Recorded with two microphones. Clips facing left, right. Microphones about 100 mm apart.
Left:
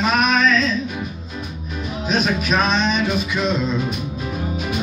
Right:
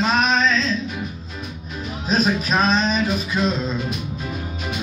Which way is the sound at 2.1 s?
35° right (ahead or behind).